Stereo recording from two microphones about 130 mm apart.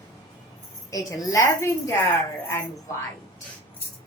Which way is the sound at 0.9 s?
25° left (ahead or behind).